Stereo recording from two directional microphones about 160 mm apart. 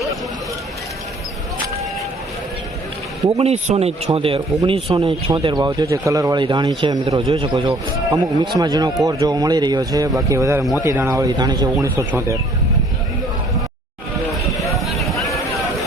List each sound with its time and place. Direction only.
3.2 s a man's voice: 40° right (ahead or behind); by 7.2 s 25° right (ahead or behind)
7.3 s a man's voice: 35° right (ahead or behind); by 12.4 s 20° right (ahead or behind)
14.8 s a sound: centre (ahead or behind)